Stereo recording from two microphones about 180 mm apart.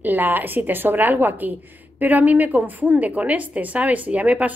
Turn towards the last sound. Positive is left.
turn(degrees=-10)  # may be behind; listen again after turning